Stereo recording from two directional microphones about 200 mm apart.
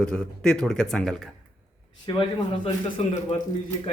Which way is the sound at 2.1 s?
25° left (ahead or behind).